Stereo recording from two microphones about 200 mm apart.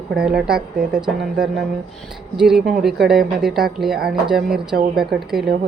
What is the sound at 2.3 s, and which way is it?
Speech, 5° right (ahead or behind).